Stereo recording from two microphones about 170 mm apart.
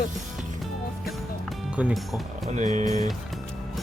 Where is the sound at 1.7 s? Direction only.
5° right (ahead or behind).